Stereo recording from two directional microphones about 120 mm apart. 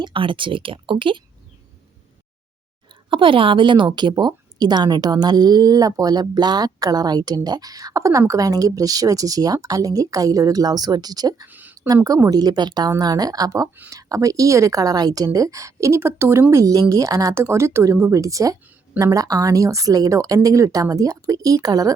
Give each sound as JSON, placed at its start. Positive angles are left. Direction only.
{"t": 0.0, "sound": "speech", "side_deg": -45}
{"t": 3.1, "sound": "a woman's voice", "side_deg": -45}
{"t": 11.4, "sound": "a sound", "side_deg": -15}
{"t": 12.0, "sound": "a woman's voice", "side_deg": -30}